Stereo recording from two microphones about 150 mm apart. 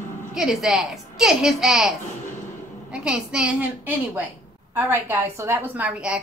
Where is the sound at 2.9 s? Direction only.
5° right (ahead or behind).